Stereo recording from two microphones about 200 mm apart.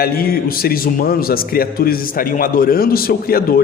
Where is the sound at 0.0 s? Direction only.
50° left (ahead or behind).